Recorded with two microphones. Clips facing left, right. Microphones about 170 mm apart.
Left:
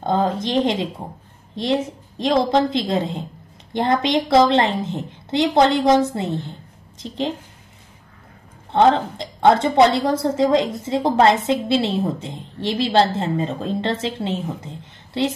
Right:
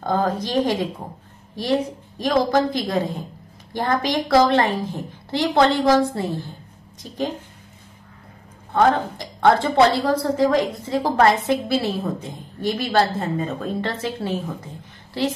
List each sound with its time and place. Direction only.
0.0 s a woman's voice: 25° left (ahead or behind)
8.7 s a woman's voice: 25° left (ahead or behind)